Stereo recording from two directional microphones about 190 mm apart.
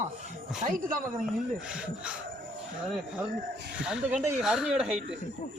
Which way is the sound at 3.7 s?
5° right (ahead or behind).